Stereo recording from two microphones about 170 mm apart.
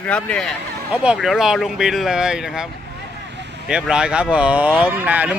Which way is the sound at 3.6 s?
5° right (ahead or behind).